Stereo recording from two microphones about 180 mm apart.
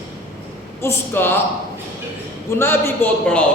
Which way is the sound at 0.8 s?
15° left (ahead or behind).